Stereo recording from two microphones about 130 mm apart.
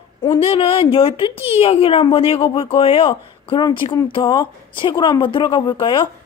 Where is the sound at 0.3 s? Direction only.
45° left (ahead or behind).